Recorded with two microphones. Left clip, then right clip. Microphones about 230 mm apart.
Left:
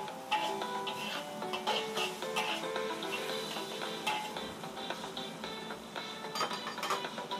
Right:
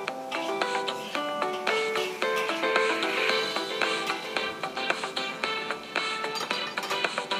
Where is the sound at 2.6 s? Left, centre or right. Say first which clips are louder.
Right 12 dB; right.